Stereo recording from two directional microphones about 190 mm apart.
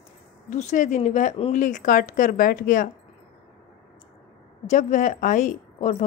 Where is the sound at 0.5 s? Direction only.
40° left (ahead or behind).